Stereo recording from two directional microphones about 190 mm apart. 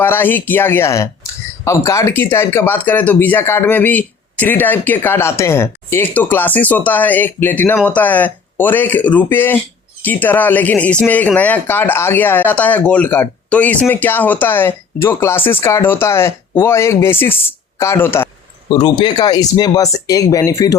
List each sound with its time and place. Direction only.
0.0 s speech: 10° left (ahead or behind)